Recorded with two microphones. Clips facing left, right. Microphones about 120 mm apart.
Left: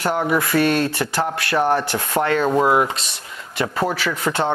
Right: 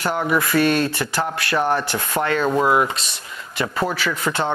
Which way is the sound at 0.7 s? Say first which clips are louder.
Even; 50° left (ahead or behind).